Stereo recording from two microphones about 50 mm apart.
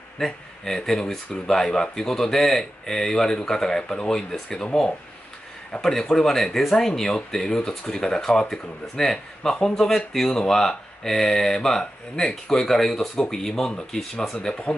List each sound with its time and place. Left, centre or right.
0.2 s speech: centre
5.7 s speech: centre